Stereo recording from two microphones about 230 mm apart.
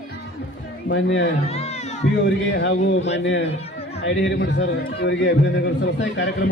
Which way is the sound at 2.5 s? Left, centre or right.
Left.